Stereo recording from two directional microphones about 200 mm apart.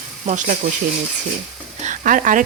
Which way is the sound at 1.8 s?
40° right (ahead or behind).